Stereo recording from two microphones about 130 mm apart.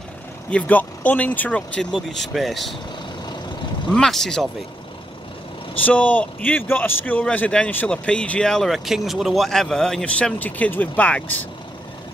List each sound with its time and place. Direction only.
0.5 s speech: 10° left (ahead or behind)
3.9 s speech: 5° left (ahead or behind)
5.8 s speech: 10° left (ahead or behind)